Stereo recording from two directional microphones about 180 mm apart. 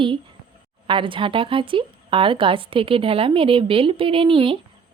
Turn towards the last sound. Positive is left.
turn(degrees=-30)  # may be behind; listen again after turning